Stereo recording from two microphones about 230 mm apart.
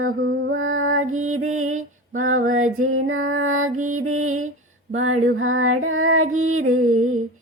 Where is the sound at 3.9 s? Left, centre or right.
Right.